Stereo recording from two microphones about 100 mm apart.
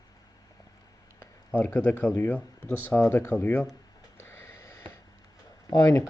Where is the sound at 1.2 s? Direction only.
20° left (ahead or behind).